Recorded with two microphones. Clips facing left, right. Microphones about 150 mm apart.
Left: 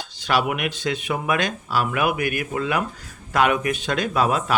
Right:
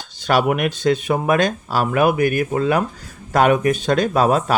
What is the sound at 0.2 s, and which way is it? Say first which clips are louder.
Speech: right 5 dB; 45° right (ahead or behind).